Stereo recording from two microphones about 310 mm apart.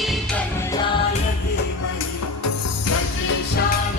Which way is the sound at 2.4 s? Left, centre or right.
Left.